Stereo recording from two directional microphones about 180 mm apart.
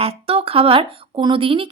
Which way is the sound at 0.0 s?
30° right (ahead or behind).